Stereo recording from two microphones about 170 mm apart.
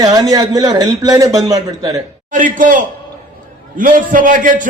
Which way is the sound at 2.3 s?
50° right (ahead or behind).